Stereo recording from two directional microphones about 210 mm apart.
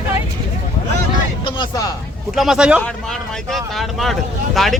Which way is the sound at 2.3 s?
Centre (ahead or behind).